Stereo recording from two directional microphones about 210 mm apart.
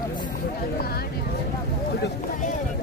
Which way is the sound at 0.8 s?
50° left (ahead or behind).